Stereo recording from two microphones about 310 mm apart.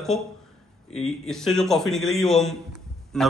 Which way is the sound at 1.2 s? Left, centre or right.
Centre.